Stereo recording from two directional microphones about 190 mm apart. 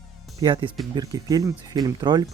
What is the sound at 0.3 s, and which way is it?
Speech, 25° right (ahead or behind).